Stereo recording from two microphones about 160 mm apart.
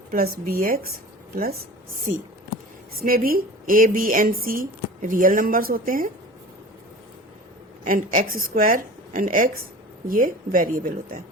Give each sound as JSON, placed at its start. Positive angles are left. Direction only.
{"t": 0.1, "sound": "speech", "side_deg": -65}
{"t": 3.0, "sound": "speech", "side_deg": -65}
{"t": 7.9, "sound": "speech", "side_deg": -60}